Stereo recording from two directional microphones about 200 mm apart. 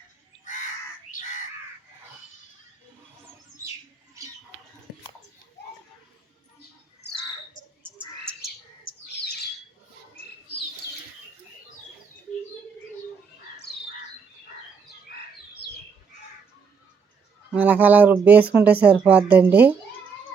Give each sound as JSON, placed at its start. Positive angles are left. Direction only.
{"t": 0.4, "sound": "a sound", "side_deg": 40}
{"t": 7.8, "sound": "frog", "side_deg": -10}
{"t": 8.8, "sound": "bird", "side_deg": 55}
{"t": 15.6, "sound": "squawk", "side_deg": 25}
{"t": 17.5, "sound": "speech", "side_deg": -10}